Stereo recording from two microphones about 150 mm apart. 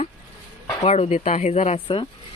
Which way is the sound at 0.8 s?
45° left (ahead or behind).